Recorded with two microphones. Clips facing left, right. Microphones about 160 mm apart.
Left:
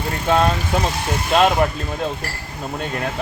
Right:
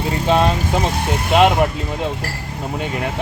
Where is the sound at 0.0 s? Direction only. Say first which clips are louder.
Right 2 dB; 15° right (ahead or behind).